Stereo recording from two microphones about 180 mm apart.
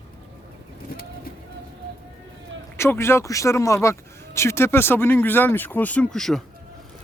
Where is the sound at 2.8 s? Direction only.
15° left (ahead or behind).